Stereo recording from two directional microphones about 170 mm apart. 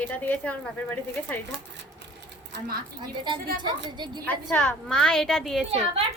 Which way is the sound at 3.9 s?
25° right (ahead or behind).